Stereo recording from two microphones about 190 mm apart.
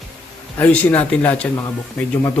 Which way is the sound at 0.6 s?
5° left (ahead or behind).